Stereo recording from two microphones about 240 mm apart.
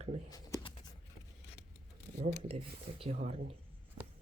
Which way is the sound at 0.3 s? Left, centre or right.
Centre.